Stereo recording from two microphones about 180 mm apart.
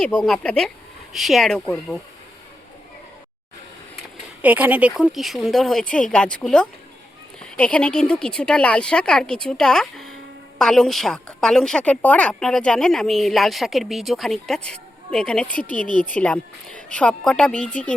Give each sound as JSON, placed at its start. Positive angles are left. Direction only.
{"t": 0.2, "sound": "a woman's voice", "side_deg": 5}
{"t": 4.4, "sound": "a woman's voice", "side_deg": -10}